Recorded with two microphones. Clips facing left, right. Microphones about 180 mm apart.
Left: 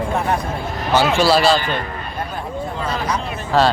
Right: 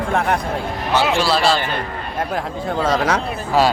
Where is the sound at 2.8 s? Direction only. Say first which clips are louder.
Right 6 dB; 90° right.